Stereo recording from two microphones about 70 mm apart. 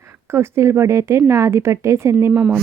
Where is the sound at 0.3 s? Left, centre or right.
Right.